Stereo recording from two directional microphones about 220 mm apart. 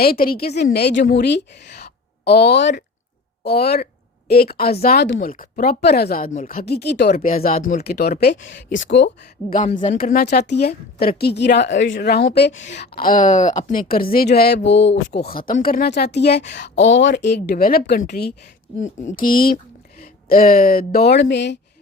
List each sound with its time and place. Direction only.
0.0 s a woman's voice: 45° left (ahead or behind)
5.3 s speech: 40° left (ahead or behind)
6.7 s a woman's voice: 50° left (ahead or behind)
8.8 s speech: 55° left (ahead or behind)
9.5 s a woman's voice: 35° left (ahead or behind); by 21.6 s 50° left (ahead or behind)